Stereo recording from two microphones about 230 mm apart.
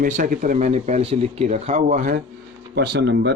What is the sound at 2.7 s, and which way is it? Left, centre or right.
Speech, right.